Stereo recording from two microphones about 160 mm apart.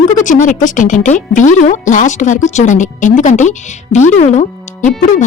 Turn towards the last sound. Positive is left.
turn(degrees=50)  # may be behind; listen again after turning